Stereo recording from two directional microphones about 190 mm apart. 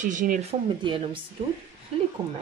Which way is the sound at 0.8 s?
25° right (ahead or behind).